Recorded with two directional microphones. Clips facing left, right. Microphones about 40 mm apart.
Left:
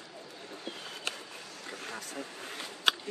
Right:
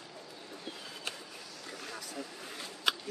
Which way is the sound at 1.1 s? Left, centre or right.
Left.